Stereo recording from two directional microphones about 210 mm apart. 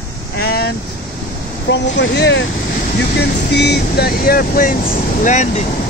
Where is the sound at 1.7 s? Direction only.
60° left (ahead or behind).